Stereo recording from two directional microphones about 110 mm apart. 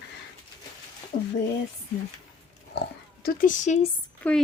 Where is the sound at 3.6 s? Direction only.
90° left.